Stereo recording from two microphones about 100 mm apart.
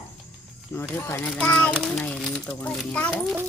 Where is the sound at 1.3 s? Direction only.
10° left (ahead or behind).